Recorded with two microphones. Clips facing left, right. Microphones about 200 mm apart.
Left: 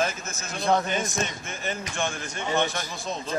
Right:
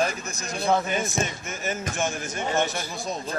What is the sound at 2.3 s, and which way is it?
Speech, 40° right (ahead or behind).